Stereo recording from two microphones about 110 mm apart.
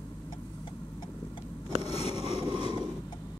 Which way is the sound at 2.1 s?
45° right (ahead or behind).